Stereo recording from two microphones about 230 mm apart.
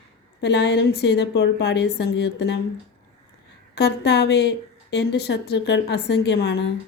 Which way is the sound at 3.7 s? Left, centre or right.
Left.